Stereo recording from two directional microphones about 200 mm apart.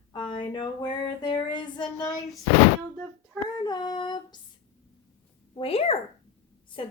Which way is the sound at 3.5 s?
20° left (ahead or behind).